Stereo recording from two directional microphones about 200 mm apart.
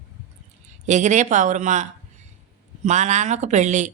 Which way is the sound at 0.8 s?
35° right (ahead or behind).